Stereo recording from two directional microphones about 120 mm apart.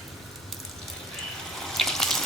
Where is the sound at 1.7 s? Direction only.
5° left (ahead or behind).